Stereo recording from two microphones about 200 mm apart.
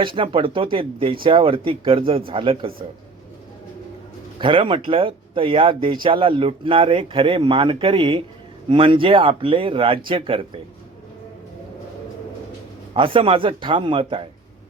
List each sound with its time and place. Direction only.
0.0 s speech: 25° right (ahead or behind)
4.4 s speech: 25° right (ahead or behind)
12.9 s speech: 25° right (ahead or behind)